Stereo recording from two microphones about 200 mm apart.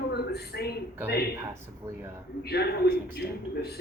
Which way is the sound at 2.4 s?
55° left (ahead or behind).